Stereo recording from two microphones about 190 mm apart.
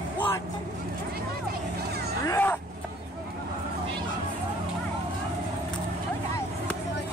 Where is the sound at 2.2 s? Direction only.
10° left (ahead or behind).